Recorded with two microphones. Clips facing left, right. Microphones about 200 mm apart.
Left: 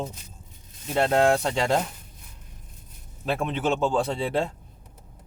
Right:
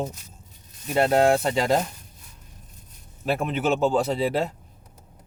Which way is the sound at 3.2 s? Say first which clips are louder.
Right 2 dB; 5° right (ahead or behind).